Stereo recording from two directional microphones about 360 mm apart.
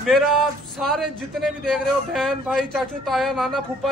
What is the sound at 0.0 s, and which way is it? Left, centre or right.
Speech, centre.